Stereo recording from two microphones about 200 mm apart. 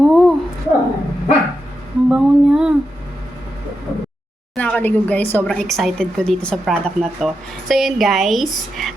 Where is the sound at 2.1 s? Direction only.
5° right (ahead or behind).